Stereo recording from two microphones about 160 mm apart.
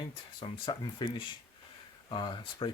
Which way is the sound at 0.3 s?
30° left (ahead or behind).